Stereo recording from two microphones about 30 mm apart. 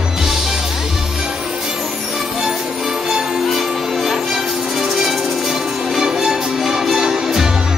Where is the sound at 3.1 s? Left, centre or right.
Centre.